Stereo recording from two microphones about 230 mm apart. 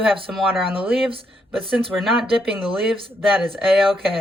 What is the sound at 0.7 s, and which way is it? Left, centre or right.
Speech, right.